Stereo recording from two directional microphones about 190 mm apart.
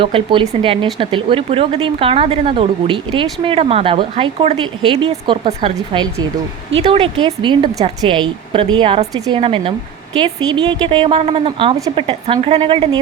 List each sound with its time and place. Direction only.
0.0 s speech: 25° right (ahead or behind)